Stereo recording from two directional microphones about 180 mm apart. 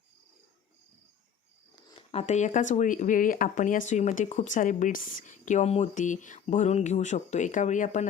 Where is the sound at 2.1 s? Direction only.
35° left (ahead or behind).